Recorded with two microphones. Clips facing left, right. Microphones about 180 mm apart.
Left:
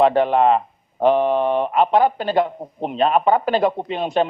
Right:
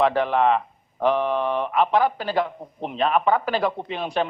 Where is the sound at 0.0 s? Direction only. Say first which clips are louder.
Left 4 dB; 25° left (ahead or behind).